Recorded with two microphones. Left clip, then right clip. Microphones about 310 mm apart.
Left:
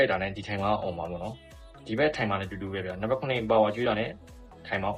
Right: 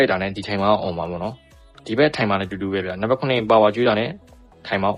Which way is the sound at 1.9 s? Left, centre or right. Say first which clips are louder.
Right 8 dB; right.